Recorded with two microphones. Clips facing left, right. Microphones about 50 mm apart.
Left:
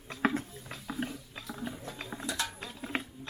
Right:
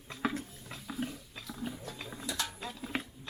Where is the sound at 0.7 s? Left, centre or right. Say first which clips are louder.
Left 1 dB; centre.